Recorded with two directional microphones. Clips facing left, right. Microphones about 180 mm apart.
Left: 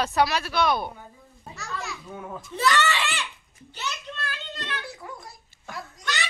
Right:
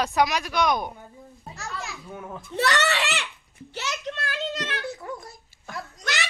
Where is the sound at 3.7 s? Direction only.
85° right.